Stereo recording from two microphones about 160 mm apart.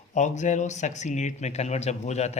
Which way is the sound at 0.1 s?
50° left (ahead or behind).